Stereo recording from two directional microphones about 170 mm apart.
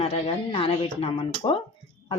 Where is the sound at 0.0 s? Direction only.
35° left (ahead or behind).